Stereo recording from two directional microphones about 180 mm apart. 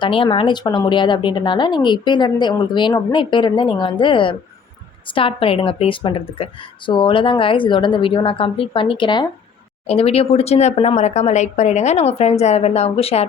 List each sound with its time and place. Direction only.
0.0 s speech: 30° left (ahead or behind)